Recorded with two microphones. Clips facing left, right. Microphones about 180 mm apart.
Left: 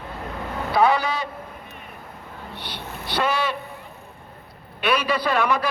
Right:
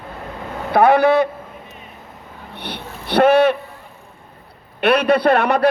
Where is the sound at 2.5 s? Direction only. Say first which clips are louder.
Right 6 dB; 60° right (ahead or behind).